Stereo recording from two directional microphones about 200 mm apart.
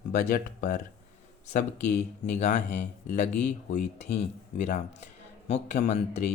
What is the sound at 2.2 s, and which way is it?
Speech, 35° left (ahead or behind).